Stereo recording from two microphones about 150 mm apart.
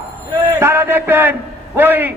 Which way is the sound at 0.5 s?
15° right (ahead or behind).